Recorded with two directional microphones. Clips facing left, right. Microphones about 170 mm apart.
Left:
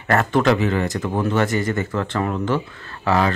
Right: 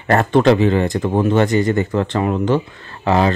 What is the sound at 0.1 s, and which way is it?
Speech, 30° right (ahead or behind).